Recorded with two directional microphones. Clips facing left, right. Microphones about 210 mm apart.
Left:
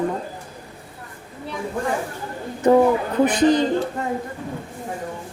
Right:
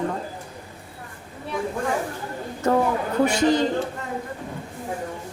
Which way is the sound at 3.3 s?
20° left (ahead or behind).